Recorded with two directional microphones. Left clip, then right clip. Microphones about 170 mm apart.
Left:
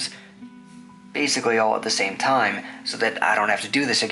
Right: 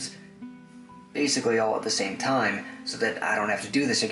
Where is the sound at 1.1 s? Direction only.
10° right (ahead or behind).